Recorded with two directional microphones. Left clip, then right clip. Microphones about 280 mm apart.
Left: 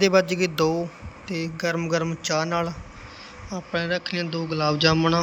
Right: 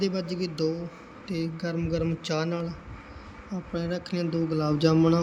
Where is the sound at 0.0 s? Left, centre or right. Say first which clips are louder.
Left 11 dB; centre.